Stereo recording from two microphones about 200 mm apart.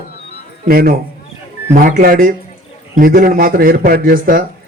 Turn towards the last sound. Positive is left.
turn(degrees=-45)  # may be behind; listen again after turning